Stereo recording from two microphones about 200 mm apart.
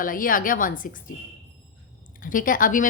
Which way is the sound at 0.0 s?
45° left (ahead or behind).